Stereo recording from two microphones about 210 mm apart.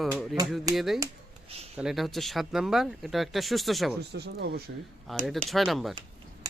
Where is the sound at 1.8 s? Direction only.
Centre (ahead or behind).